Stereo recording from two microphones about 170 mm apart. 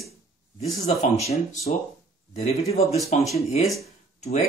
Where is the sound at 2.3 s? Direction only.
40° left (ahead or behind).